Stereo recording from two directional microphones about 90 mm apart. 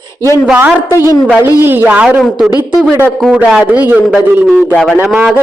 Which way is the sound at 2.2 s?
5° right (ahead or behind).